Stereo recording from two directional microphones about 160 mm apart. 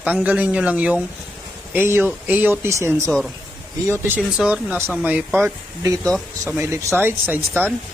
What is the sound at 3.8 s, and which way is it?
Speech, 15° right (ahead or behind).